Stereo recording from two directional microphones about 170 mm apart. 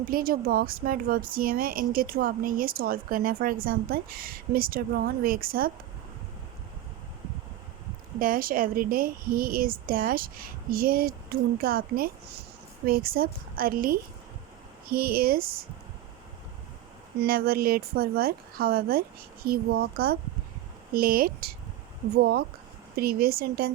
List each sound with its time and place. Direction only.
0.0 s speech: 55° right (ahead or behind)
8.2 s speech: 55° right (ahead or behind)
17.2 s speech: 60° right (ahead or behind)